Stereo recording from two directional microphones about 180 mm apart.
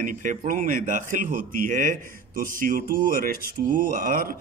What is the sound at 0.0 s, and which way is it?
A man's voice, 45° right (ahead or behind).